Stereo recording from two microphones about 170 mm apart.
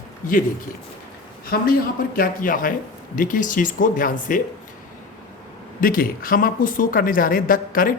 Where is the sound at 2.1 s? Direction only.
55° left (ahead or behind).